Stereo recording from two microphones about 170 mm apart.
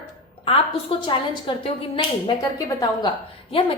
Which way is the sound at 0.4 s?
30° left (ahead or behind).